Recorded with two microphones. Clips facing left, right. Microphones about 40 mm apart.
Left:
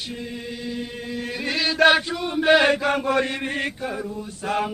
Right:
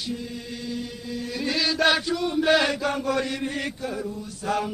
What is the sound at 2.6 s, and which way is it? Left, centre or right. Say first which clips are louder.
Chant: left 5 dB; left.